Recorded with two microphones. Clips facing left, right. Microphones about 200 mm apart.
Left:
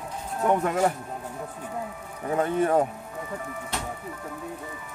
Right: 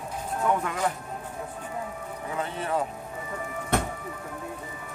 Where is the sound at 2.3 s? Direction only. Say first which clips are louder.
Left 8 dB; 50° left (ahead or behind).